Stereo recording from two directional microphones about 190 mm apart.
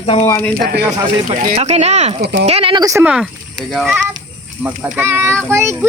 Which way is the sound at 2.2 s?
65° right (ahead or behind).